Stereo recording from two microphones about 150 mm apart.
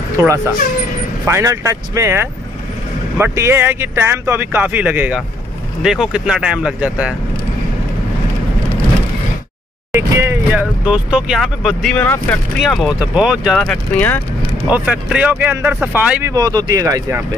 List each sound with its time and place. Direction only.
1.2 s speech: 20° right (ahead or behind)
9.9 s speech: 15° right (ahead or behind)
10.9 s speech: 5° right (ahead or behind)
11.9 s speech: 10° left (ahead or behind)
12.5 s speech: centre (ahead or behind)
14.7 s speech: 10° right (ahead or behind)
16.3 s speech: 25° right (ahead or behind)